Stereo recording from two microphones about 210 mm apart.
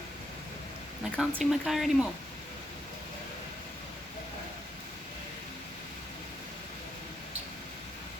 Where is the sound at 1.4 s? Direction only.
Centre (ahead or behind).